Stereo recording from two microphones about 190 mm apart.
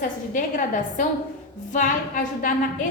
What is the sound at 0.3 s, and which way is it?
A woman's voice, 40° left (ahead or behind).